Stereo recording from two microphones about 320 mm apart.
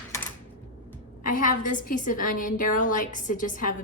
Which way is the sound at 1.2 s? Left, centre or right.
Left.